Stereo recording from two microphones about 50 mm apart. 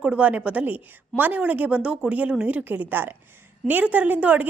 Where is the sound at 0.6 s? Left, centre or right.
Right.